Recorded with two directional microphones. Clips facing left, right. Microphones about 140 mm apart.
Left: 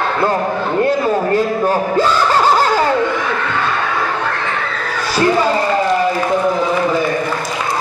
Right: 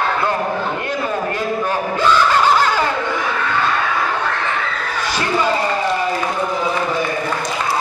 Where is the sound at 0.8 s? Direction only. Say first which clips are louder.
Left 6 dB; 40° left (ahead or behind).